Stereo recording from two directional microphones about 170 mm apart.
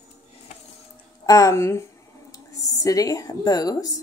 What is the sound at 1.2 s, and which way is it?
A woman's voice, 20° left (ahead or behind).